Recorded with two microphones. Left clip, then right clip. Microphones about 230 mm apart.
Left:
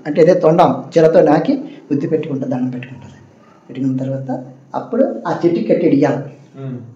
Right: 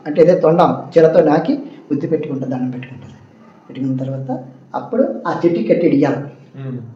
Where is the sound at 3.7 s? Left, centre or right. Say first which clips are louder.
Left 2 dB; left.